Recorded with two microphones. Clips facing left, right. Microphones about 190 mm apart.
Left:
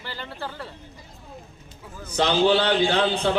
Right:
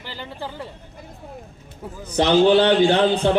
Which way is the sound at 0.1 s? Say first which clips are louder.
Right 2 dB; 15° right (ahead or behind).